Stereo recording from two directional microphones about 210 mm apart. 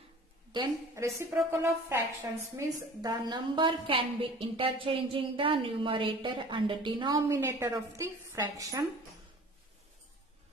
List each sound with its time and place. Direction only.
0.5 s a woman's voice: 20° right (ahead or behind)